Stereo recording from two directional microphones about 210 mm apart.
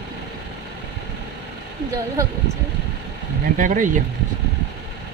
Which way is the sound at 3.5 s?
40° right (ahead or behind).